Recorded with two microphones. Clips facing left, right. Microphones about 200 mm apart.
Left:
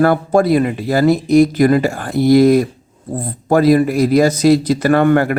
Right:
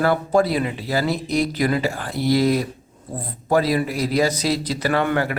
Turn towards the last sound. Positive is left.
turn(degrees=50)  # may be behind; listen again after turning